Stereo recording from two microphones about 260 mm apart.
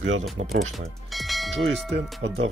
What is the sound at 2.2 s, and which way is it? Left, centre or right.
Speech, right.